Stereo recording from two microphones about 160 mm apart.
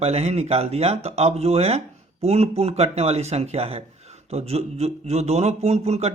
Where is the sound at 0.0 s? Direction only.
40° right (ahead or behind).